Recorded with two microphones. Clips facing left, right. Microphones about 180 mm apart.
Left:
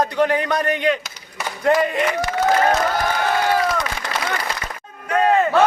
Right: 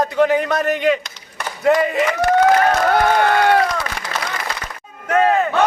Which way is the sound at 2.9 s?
60° right (ahead or behind).